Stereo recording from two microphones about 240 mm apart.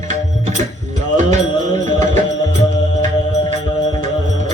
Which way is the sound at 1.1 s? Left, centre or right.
Right.